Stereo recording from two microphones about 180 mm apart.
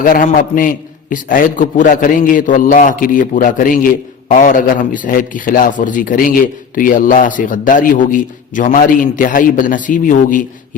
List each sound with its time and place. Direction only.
0.0 s speech: 50° left (ahead or behind)